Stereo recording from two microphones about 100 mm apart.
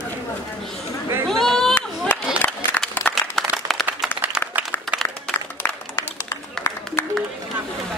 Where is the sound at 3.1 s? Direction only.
20° left (ahead or behind).